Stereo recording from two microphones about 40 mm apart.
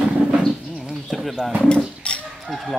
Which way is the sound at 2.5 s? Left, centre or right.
Centre.